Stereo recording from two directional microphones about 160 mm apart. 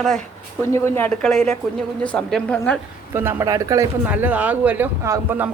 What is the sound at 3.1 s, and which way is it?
Speech, 15° right (ahead or behind).